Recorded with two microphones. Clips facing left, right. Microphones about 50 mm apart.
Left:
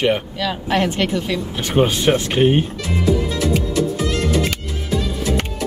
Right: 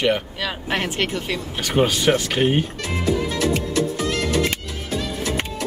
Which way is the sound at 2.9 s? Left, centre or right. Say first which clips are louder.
Left 3 dB; right.